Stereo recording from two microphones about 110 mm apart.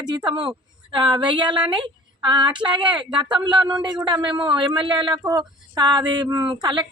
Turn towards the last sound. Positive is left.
turn(degrees=-45)  # may be behind; listen again after turning